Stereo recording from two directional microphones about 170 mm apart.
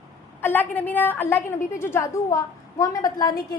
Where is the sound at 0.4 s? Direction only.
10° left (ahead or behind).